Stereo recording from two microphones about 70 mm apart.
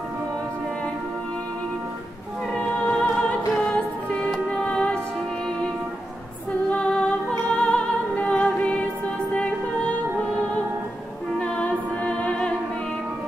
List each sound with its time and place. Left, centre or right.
2.5 s music: centre
6.7 s music: centre
11.3 s music: centre